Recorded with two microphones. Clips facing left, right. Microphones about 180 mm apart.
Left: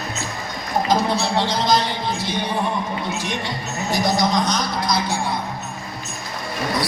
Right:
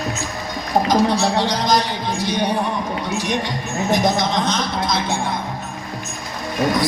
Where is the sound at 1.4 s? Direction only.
15° right (ahead or behind).